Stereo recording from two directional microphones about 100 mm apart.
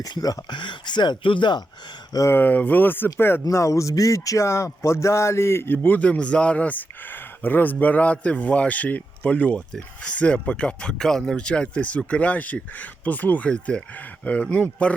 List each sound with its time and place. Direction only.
0.0 s speech: 40° left (ahead or behind)
2.3 s speech: 20° left (ahead or behind)